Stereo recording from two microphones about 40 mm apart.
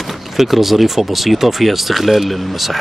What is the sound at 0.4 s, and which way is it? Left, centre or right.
Speech, centre.